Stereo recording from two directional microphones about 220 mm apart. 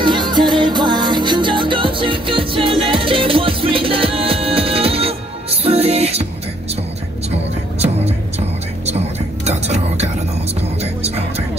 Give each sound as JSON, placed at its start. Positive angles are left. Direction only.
{"t": 0.0, "sound": "music", "side_deg": -20}
{"t": 8.8, "sound": "whispering", "side_deg": -30}
{"t": 10.8, "sound": "music", "side_deg": -30}